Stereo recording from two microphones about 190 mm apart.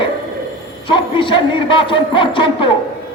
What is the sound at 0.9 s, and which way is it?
A woman's voice, 25° left (ahead or behind).